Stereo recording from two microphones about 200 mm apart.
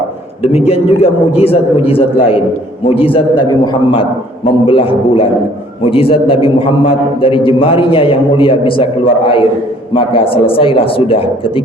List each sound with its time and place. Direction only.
0.4 s a man's voice: 30° left (ahead or behind)